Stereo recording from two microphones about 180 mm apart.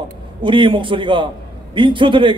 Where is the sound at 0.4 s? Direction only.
25° right (ahead or behind).